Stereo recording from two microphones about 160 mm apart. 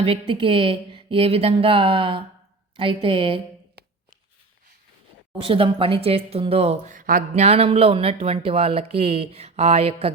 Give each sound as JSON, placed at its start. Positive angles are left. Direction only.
{"t": 0.0, "sound": "speech", "side_deg": -35}
{"t": 5.4, "sound": "speech", "side_deg": -35}